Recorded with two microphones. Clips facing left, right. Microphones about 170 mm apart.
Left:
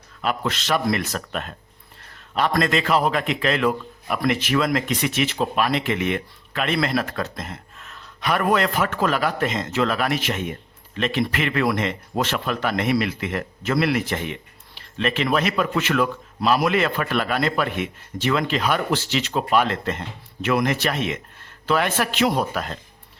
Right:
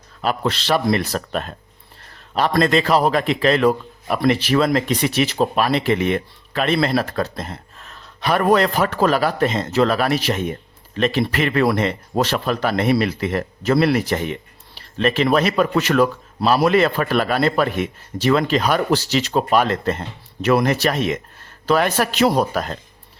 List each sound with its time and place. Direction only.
0.2 s a man's voice: 35° right (ahead or behind)